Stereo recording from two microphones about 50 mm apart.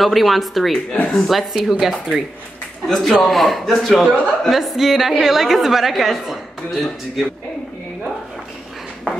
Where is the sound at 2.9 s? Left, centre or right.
Centre.